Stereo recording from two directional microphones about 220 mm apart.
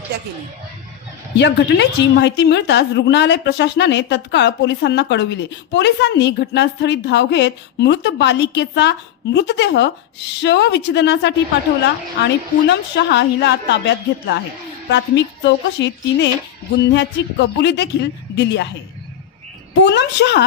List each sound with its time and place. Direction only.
0.1 s a woman's voice: 50° right (ahead or behind)
1.4 s a woman's voice: 50° left (ahead or behind)
12.6 s a woman's voice: 50° left (ahead or behind)
19.8 s a woman's voice: 50° left (ahead or behind)